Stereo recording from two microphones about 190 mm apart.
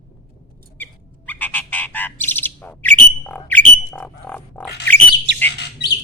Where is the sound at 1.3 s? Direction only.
10° left (ahead or behind).